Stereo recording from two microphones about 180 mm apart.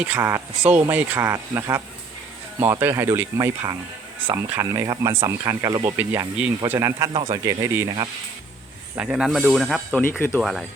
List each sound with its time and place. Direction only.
0.0 s speech: 10° right (ahead or behind)
6.0 s speech: 5° right (ahead or behind)
7.1 s speech: 30° right (ahead or behind)
7.4 s speech: 15° right (ahead or behind)
9.0 s speech: 5° right (ahead or behind)
10.0 s speech: 10° left (ahead or behind)
10.4 s speech: centre (ahead or behind)